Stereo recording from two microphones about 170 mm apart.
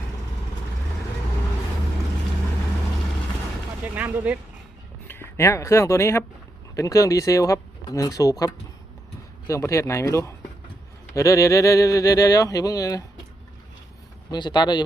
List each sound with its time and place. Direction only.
3.8 s a sound: 10° right (ahead or behind)
5.0 s speech: 15° left (ahead or behind)
9.5 s speech: 15° left (ahead or behind)
14.3 s speech: 25° left (ahead or behind)